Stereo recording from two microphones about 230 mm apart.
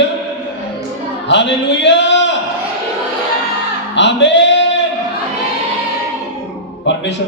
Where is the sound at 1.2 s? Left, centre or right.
Left.